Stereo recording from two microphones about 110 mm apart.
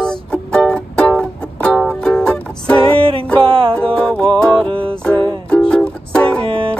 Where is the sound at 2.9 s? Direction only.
55° right (ahead or behind).